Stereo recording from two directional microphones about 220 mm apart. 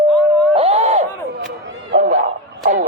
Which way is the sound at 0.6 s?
30° right (ahead or behind).